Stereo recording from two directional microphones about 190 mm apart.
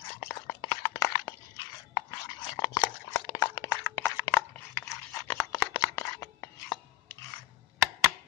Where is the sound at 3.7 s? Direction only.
10° left (ahead or behind).